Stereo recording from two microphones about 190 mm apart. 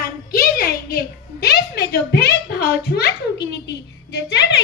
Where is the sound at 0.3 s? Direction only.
55° left (ahead or behind).